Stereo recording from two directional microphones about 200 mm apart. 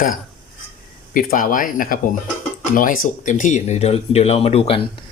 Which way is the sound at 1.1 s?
45° left (ahead or behind).